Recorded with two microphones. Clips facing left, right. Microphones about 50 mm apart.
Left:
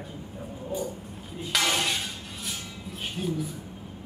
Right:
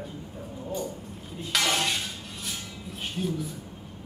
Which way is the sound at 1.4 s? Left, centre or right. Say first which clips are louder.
Even; centre.